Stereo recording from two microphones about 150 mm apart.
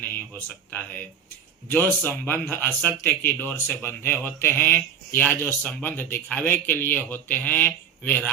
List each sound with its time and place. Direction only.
0.1 s speech: 10° left (ahead or behind)